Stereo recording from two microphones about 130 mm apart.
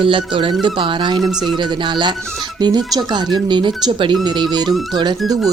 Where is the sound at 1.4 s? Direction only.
35° right (ahead or behind).